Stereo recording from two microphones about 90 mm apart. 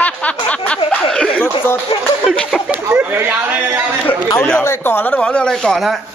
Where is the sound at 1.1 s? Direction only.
10° left (ahead or behind).